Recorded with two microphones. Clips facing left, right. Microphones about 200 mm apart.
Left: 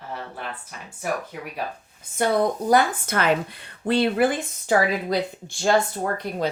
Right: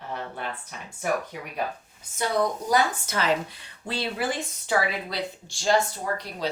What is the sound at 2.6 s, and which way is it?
Speech, 55° left (ahead or behind).